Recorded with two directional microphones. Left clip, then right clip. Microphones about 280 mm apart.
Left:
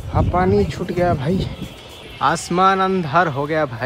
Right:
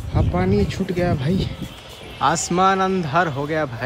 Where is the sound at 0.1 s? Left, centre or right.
Left.